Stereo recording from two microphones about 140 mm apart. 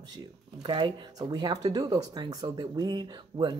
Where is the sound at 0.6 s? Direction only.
35° right (ahead or behind).